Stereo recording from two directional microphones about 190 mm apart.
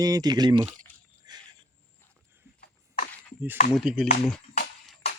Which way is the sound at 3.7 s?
5° right (ahead or behind).